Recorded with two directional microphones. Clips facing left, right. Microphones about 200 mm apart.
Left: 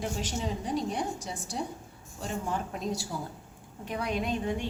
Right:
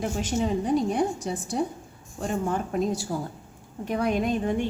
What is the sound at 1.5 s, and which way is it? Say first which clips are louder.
A woman's voice: right 6 dB; 55° right (ahead or behind).